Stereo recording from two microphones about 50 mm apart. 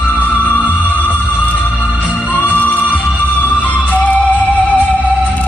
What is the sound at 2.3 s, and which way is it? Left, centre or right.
Music, left.